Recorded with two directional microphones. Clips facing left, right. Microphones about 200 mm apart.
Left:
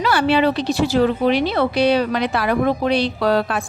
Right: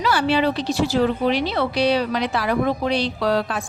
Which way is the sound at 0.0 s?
60° left (ahead or behind).